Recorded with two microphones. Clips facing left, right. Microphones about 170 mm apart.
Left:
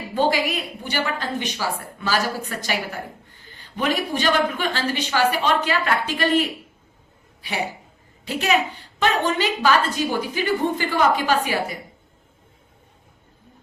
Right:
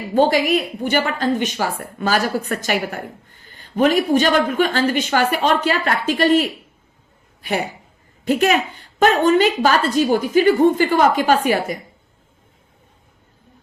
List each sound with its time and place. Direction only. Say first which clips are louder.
0.1 s a woman's voice: right 6 dB; 45° right (ahead or behind)